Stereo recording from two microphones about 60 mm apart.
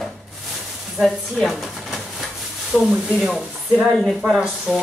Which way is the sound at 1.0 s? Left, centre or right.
Centre.